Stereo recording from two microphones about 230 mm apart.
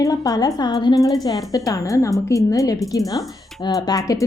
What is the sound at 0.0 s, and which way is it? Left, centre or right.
A woman's voice, centre.